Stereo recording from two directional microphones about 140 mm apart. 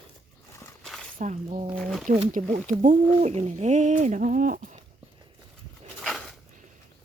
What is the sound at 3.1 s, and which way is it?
Speech, 50° right (ahead or behind).